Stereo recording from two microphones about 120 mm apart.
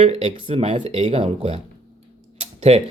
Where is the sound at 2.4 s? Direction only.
60° right (ahead or behind).